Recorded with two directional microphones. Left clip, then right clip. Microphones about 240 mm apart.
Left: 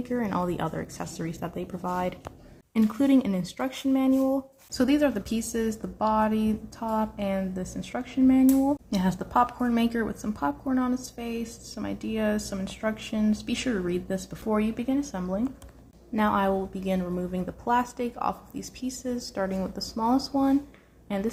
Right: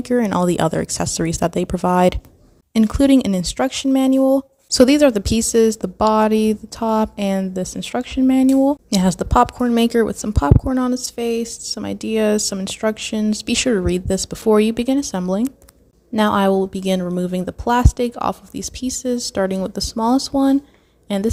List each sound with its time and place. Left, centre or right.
0.0 s a woman's voice: right